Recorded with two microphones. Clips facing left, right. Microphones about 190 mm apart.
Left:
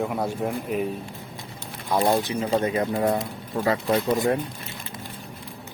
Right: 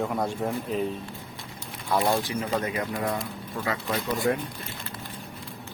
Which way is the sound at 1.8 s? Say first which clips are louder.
Left 3 dB; 20° left (ahead or behind).